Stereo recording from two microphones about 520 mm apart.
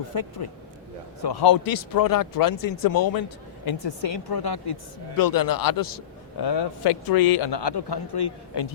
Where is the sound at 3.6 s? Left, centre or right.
Left.